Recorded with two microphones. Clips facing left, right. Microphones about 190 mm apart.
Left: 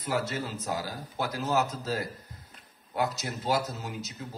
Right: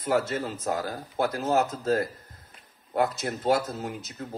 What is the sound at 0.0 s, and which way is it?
Speech, 50° right (ahead or behind).